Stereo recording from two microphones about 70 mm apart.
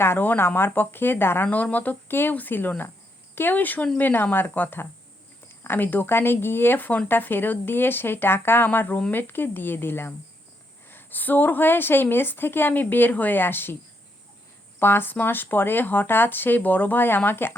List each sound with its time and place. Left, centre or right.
0.0 s a woman's voice: left
14.8 s a woman's voice: left